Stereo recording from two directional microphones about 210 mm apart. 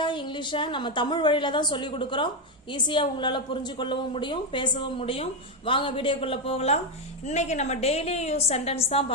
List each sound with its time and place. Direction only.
0.0 s a woman's voice: 20° left (ahead or behind)